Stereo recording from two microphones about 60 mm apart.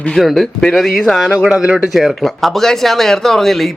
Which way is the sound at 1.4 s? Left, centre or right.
Centre.